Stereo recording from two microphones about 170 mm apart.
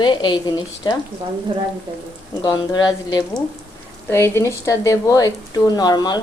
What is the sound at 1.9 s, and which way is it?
Speech, 30° right (ahead or behind).